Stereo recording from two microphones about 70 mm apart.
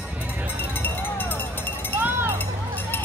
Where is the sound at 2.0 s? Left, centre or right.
Right.